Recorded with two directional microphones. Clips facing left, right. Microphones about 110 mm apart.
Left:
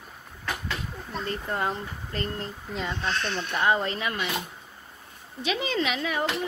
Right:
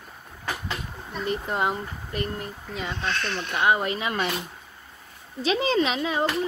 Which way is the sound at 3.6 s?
15° right (ahead or behind).